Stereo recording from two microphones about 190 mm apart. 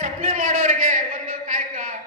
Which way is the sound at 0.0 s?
40° right (ahead or behind).